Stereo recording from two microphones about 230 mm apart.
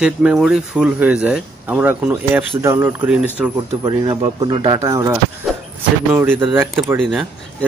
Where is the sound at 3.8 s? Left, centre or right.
Centre.